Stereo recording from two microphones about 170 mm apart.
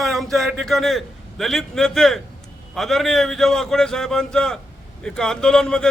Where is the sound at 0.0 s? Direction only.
Centre (ahead or behind).